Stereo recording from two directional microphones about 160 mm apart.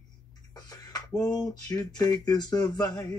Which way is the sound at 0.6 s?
25° left (ahead or behind).